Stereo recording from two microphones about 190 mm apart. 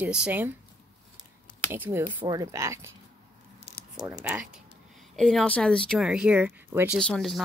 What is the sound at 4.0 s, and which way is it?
Speech, 5° right (ahead or behind).